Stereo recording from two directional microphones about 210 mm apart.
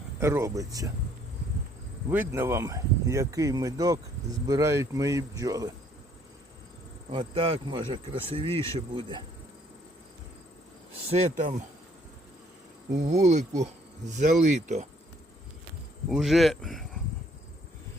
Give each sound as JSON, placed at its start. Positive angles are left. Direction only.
{"t": 0.2, "sound": "speech", "side_deg": -15}
{"t": 2.0, "sound": "speech", "side_deg": -10}
{"t": 7.1, "sound": "speech", "side_deg": -25}
{"t": 11.1, "sound": "speech", "side_deg": -35}
{"t": 13.1, "sound": "speech", "side_deg": -35}
{"t": 16.0, "sound": "speech", "side_deg": 0}